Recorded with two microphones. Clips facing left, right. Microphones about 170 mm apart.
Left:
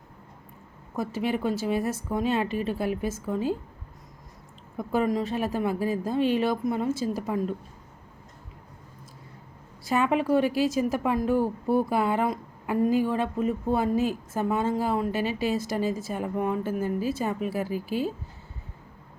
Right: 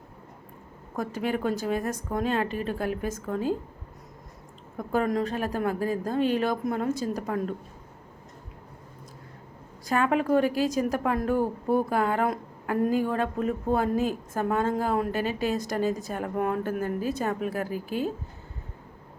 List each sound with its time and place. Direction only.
1.4 s a woman's voice: 5° left (ahead or behind)
4.8 s a woman's voice: 5° left (ahead or behind)
6.1 s a woman's voice: 45° right (ahead or behind)
6.4 s a woman's voice: 5° left (ahead or behind)
9.9 s a woman's voice: 5° left (ahead or behind)
10.3 s a woman's voice: 45° right (ahead or behind)
10.7 s a woman's voice: 5° left (ahead or behind)
11.3 s speech: 15° right (ahead or behind)
11.9 s a woman's voice: 10° left (ahead or behind)
15.1 s a woman's voice: 45° right (ahead or behind)
15.5 s a woman's voice: 5° left (ahead or behind)
17.7 s a woman's voice: 45° right (ahead or behind)